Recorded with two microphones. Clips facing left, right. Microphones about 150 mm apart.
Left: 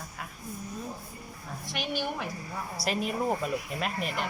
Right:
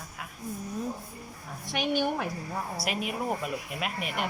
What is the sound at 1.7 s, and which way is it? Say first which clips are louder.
Speech: right 5 dB; 55° right (ahead or behind).